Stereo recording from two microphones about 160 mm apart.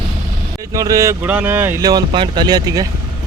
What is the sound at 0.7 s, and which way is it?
Speech, 20° right (ahead or behind).